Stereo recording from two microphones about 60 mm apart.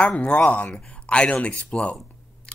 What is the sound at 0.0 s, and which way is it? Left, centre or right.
Speech, centre.